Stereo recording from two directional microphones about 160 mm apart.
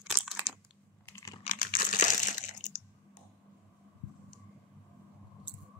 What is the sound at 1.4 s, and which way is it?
Crushing, 60° left (ahead or behind).